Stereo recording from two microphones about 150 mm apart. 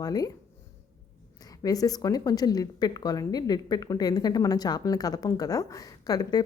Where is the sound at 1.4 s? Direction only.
25° left (ahead or behind).